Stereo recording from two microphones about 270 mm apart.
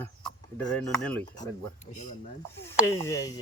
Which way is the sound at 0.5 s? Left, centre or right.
Centre.